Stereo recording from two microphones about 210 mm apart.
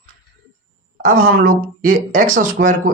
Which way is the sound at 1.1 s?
40° right (ahead or behind).